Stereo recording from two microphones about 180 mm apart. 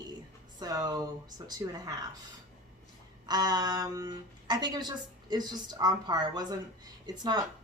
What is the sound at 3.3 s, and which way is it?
Speech, 25° right (ahead or behind).